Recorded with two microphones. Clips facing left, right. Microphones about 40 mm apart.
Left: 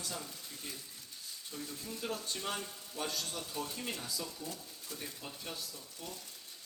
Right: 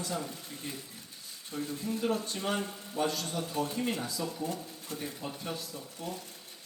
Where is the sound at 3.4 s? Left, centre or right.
Right.